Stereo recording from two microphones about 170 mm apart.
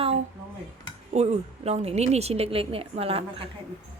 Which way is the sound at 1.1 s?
40° right (ahead or behind).